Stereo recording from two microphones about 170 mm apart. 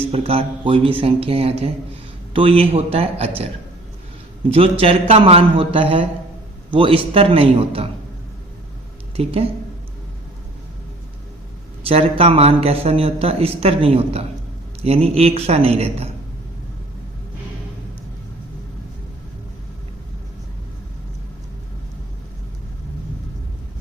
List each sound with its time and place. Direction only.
0.0 s a man's voice: 35° right (ahead or behind)
9.1 s a man's voice: 35° right (ahead or behind)
11.9 s a man's voice: 35° right (ahead or behind)